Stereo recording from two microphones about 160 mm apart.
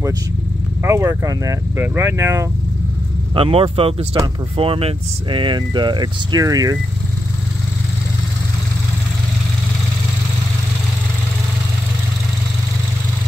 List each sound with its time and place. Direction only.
0.8 s speech: 20° right (ahead or behind)
3.3 s speech: 35° right (ahead or behind)